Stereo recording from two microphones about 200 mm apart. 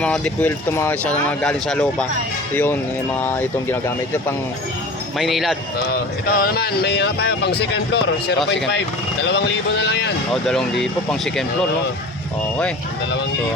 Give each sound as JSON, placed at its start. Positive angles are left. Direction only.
{"t": 0.0, "sound": "speech", "side_deg": 10}
{"t": 3.2, "sound": "speech", "side_deg": 10}
{"t": 5.1, "sound": "speech", "side_deg": 0}
{"t": 6.2, "sound": "speech", "side_deg": 50}
{"t": 10.4, "sound": "speech", "side_deg": 0}